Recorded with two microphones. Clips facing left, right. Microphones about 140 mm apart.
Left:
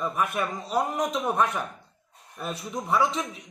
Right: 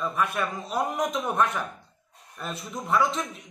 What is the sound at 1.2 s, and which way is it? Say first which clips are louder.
A man's voice: even; 5° left (ahead or behind).